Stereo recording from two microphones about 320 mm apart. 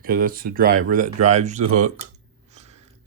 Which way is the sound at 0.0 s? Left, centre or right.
Right.